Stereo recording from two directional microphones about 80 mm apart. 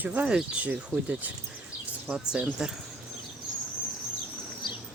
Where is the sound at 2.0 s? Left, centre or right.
Centre.